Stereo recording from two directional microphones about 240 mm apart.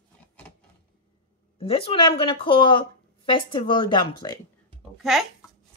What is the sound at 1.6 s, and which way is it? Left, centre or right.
A woman's voice, left.